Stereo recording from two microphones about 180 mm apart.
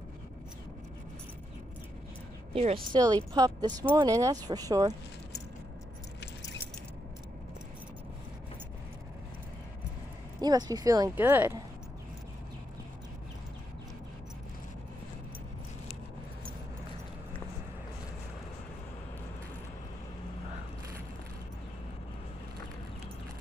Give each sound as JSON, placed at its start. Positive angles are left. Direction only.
{"t": 2.5, "sound": "speech", "side_deg": -30}
{"t": 10.4, "sound": "speech", "side_deg": -20}
{"t": 11.1, "sound": "speech", "side_deg": -10}